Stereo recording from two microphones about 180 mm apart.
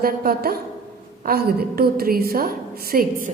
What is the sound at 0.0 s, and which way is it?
A woman's voice, 55° right (ahead or behind).